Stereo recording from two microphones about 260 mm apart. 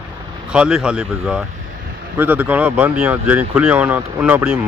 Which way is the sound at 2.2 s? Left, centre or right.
Centre.